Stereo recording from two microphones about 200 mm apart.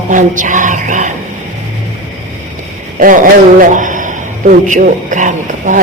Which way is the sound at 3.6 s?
40° right (ahead or behind).